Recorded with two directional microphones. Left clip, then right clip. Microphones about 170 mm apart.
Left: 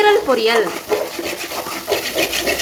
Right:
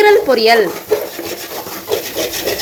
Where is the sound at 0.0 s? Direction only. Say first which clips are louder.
Right 4 dB; 20° right (ahead or behind).